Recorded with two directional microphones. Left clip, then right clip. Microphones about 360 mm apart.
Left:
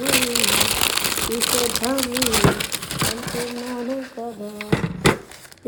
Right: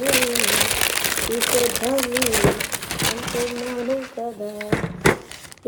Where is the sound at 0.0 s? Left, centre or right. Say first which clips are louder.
Even; centre.